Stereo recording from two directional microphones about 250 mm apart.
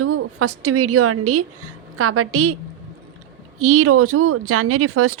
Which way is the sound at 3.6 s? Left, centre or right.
Right.